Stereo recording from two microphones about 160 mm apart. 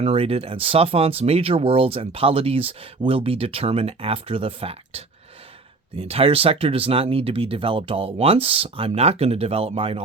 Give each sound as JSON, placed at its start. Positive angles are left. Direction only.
{"t": 0.0, "sound": "speech", "side_deg": -40}